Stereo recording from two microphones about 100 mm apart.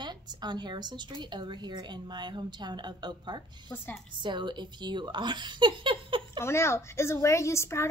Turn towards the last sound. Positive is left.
turn(degrees=30)  # may be behind; listen again after turning